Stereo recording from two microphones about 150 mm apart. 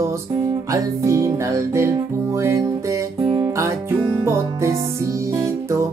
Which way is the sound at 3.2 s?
35° right (ahead or behind).